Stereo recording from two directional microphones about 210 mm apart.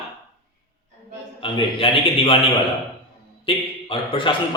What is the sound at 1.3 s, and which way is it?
A man's voice, 25° left (ahead or behind).